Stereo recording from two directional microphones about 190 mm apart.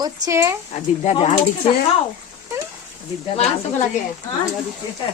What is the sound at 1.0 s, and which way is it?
Speech, 30° left (ahead or behind).